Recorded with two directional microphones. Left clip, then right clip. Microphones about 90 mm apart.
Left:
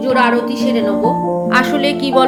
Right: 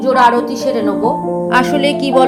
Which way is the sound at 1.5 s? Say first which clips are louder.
Right 3 dB; 45° right (ahead or behind).